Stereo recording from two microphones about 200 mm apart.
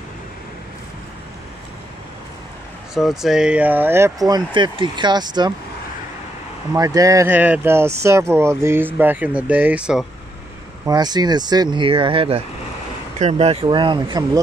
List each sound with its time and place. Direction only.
2.9 s speech: centre (ahead or behind); by 5.5 s 20° right (ahead or behind)
6.7 s speech: 15° right (ahead or behind)
10.9 s speech: 20° right (ahead or behind)